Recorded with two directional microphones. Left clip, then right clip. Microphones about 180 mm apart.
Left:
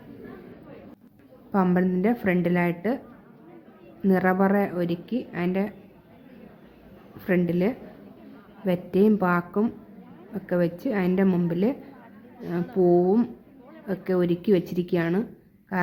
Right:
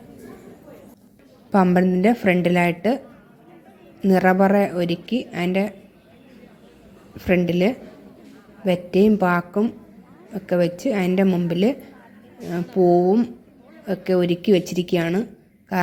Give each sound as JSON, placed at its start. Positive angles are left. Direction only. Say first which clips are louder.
{"t": 1.5, "sound": "a woman's voice", "louder": "right 6 dB", "side_deg": -25}
{"t": 4.0, "sound": "a woman's voice", "louder": "right 6 dB", "side_deg": -20}
{"t": 7.3, "sound": "a woman's voice", "louder": "right 5 dB", "side_deg": -20}